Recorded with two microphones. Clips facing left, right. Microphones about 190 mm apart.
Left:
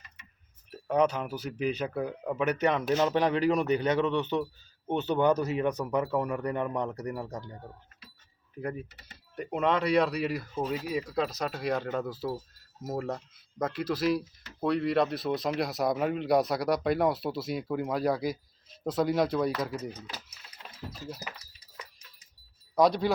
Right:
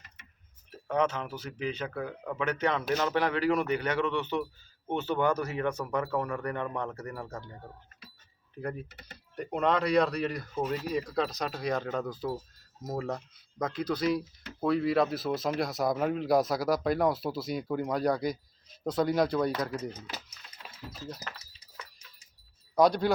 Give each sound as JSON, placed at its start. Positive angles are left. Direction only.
{"t": 0.9, "sound": "speech", "side_deg": 15}
{"t": 8.6, "sound": "speech", "side_deg": 10}
{"t": 22.7, "sound": "speech", "side_deg": 0}